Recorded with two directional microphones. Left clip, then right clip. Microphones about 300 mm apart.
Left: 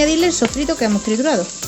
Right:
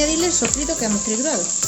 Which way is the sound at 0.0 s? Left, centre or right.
Left.